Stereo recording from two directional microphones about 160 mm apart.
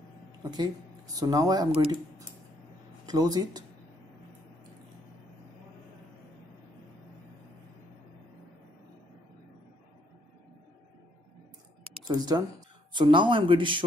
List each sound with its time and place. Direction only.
0.4 s speech: 25° right (ahead or behind)
12.1 s speech: 25° right (ahead or behind)